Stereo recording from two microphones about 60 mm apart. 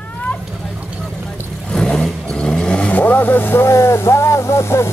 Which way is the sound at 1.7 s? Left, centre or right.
Centre.